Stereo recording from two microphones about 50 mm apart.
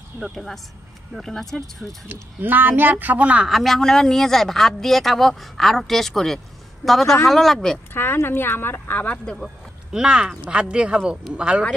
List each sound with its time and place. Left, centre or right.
0.3 s speech: centre
2.4 s speech: right
3.4 s speech: centre
7.9 s speech: left
9.9 s speech: centre